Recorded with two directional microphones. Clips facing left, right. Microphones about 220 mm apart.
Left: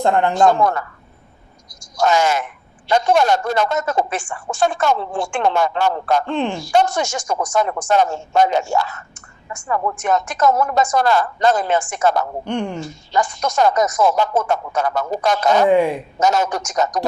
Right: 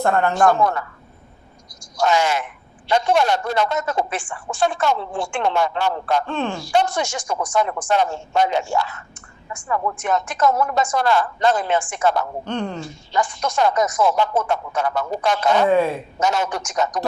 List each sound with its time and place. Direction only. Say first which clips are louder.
0.0 s a man's voice: left 2 dB; 15° left (ahead or behind)
1.8 s a man's voice: left 2 dB; 45° left (ahead or behind)
6.2 s a man's voice: left 3 dB; 15° left (ahead or behind)
6.6 s a man's voice: left 2 dB; 45° left (ahead or behind)
12.4 s a man's voice: left 2 dB; 15° left (ahead or behind)
12.8 s a woman's voice: left 2 dB; 40° left (ahead or behind)
15.6 s a man's voice: left 3 dB; 15° left (ahead or behind)
16.2 s a woman's voice: left 4 dB; 40° left (ahead or behind)